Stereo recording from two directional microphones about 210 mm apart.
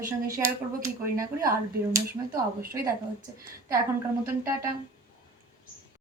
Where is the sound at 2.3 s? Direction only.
45° right (ahead or behind).